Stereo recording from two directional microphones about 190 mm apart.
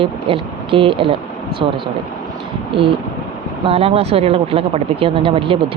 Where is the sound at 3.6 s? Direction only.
30° right (ahead or behind).